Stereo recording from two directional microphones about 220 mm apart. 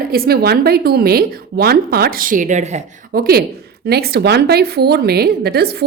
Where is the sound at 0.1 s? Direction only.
45° right (ahead or behind).